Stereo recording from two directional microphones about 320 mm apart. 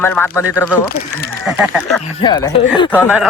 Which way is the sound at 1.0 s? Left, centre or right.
Left.